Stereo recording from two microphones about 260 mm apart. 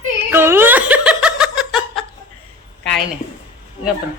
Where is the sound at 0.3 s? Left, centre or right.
Centre.